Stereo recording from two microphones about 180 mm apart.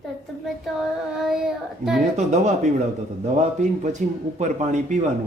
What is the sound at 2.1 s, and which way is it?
A man's voice, 40° right (ahead or behind).